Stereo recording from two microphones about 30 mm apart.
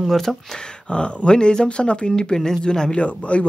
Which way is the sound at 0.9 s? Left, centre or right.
Left.